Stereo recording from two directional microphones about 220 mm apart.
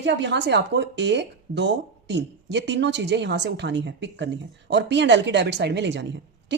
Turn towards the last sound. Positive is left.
turn(degrees=-55)  # may be behind; listen again after turning